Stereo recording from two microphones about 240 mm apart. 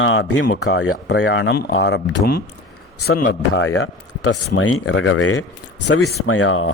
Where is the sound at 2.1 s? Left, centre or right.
Left.